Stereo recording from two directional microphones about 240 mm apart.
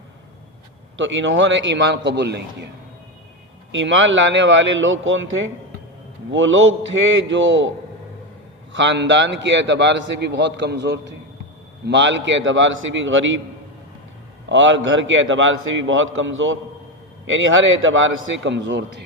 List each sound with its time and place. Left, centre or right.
0.9 s a man's voice: right
3.7 s a man's voice: right
8.7 s a man's voice: right
14.5 s a man's voice: right